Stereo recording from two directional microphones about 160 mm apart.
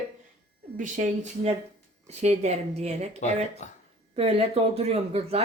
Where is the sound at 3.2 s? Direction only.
50° left (ahead or behind).